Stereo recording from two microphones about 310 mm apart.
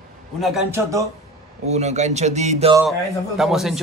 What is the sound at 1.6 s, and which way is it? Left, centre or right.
Speech, right.